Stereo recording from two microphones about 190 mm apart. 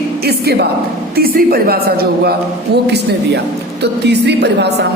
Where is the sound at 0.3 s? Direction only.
60° right (ahead or behind).